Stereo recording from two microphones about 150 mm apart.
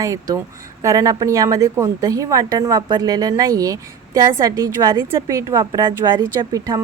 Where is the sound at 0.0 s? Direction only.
20° right (ahead or behind).